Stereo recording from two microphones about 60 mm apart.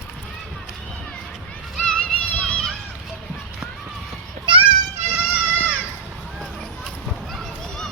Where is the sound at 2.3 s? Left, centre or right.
Centre.